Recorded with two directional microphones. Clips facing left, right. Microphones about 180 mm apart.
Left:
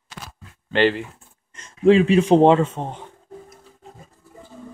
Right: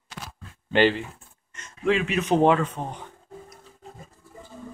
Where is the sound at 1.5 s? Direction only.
30° left (ahead or behind).